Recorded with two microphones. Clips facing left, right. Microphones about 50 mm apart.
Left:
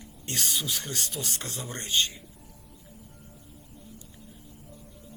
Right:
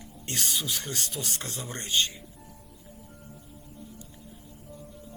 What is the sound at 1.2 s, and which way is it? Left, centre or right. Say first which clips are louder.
Speech: even; centre.